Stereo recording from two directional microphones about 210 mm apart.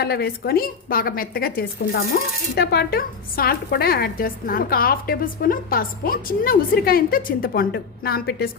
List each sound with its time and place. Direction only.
0.0 s a woman's voice: 50° left (ahead or behind)